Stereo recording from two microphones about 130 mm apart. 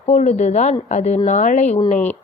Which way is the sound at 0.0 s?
65° left (ahead or behind).